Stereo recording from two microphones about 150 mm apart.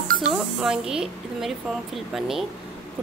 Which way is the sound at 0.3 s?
5° right (ahead or behind).